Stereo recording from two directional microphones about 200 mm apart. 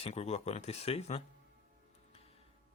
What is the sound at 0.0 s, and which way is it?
Speech, 35° left (ahead or behind).